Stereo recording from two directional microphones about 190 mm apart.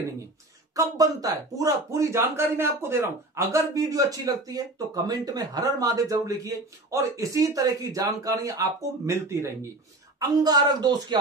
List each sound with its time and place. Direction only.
0.7 s a woman's voice: 20° right (ahead or behind)